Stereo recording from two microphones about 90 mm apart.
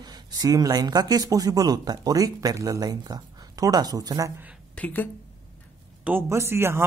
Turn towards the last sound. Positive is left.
turn(degrees=-25)  # may be behind; listen again after turning